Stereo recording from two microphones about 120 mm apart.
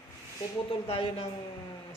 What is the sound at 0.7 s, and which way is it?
Speech, 50° left (ahead or behind).